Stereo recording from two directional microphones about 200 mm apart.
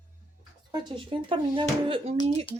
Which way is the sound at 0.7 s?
20° right (ahead or behind).